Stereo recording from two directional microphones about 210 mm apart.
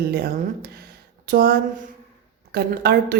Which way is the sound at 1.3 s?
45° right (ahead or behind).